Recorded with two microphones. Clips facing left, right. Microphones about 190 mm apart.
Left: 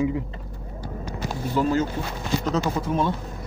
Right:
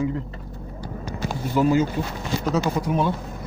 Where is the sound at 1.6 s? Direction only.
10° right (ahead or behind).